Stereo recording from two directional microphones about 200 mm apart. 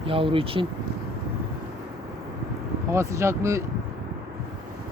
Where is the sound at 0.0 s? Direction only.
25° right (ahead or behind).